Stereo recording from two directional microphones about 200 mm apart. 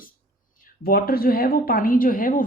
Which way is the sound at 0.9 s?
50° left (ahead or behind).